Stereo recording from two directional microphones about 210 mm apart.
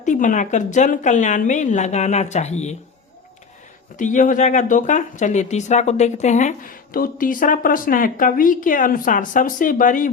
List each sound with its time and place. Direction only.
0.0 s speech: 35° left (ahead or behind)
3.9 s speech: 35° left (ahead or behind)